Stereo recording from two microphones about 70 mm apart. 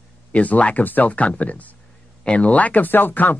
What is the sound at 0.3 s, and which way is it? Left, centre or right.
Speech, left.